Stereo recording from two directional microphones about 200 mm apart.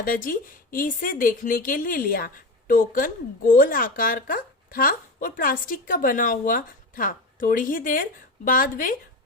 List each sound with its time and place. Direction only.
0.0 s a woman's voice: 45° left (ahead or behind)